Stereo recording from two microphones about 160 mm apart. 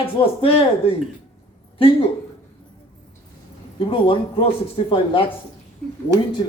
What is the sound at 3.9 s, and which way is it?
A man's voice, 30° left (ahead or behind).